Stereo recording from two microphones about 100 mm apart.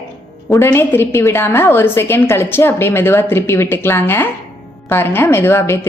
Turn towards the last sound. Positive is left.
turn(degrees=25)  # may be behind; listen again after turning